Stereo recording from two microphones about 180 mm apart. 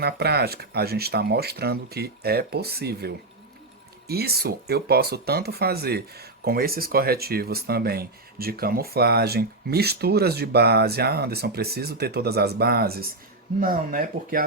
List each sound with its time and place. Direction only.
0.0 s speech: 65° right (ahead or behind)